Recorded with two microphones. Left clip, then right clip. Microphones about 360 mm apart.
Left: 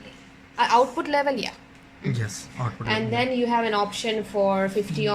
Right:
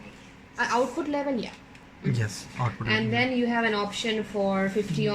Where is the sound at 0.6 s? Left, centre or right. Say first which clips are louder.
Left 6 dB; left.